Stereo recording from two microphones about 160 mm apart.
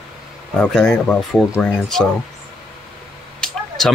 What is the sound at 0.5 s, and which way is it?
Speech, 5° left (ahead or behind).